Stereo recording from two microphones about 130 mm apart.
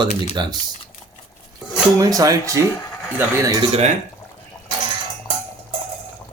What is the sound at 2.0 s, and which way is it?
Speech, 25° right (ahead or behind).